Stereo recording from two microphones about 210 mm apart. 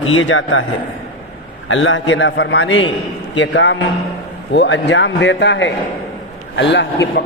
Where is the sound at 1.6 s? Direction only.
65° left (ahead or behind).